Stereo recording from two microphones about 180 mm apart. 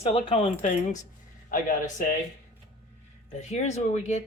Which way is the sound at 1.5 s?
50° left (ahead or behind).